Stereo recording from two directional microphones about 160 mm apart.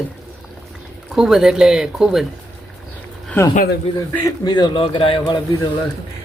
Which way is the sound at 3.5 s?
70° left (ahead or behind).